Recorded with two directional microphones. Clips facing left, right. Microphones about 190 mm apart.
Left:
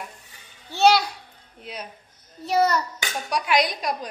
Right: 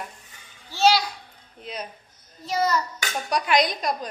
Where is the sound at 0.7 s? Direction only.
60° left (ahead or behind).